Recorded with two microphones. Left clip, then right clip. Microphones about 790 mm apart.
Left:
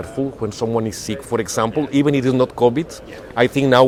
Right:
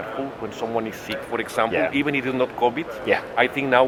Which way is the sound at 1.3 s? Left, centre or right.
Left.